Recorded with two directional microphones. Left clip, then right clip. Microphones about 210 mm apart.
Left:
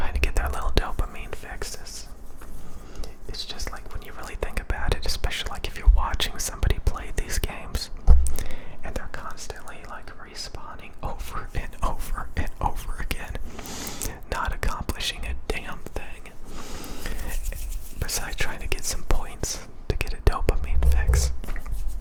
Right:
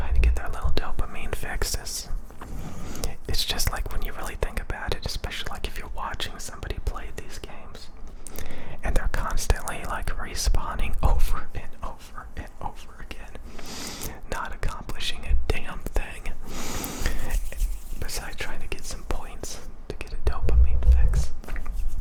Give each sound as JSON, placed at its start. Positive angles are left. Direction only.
{"t": 0.0, "sound": "whispering", "side_deg": 10}
{"t": 8.4, "sound": "whispering", "side_deg": 0}
{"t": 8.8, "sound": "whispering", "side_deg": -15}
{"t": 11.3, "sound": "whispering", "side_deg": 5}
{"t": 15.8, "sound": "whispering", "side_deg": -10}
{"t": 16.5, "sound": "snort", "side_deg": -20}
{"t": 18.0, "sound": "whispering", "side_deg": 5}